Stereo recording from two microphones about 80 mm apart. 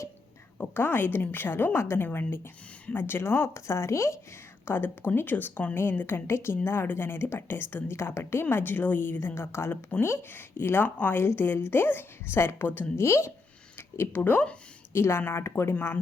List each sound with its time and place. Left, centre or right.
0.6 s a woman's voice: left
4.6 s a woman's voice: left
13.7 s a sound: left
14.2 s a woman's voice: left
14.9 s speech: left